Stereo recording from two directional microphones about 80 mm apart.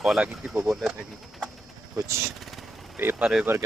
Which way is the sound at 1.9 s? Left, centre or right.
Right.